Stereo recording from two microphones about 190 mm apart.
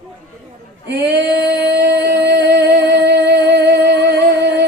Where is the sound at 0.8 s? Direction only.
60° right (ahead or behind).